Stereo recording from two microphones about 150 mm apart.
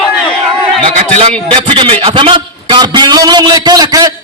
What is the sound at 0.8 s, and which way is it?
A man's voice, 45° right (ahead or behind).